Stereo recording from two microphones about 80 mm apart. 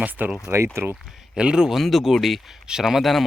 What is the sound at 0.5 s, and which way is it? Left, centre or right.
Speech, right.